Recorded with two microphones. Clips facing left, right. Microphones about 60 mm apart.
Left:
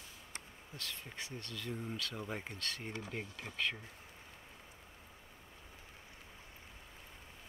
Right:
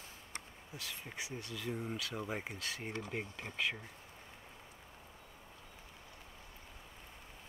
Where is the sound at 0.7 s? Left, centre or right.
Centre.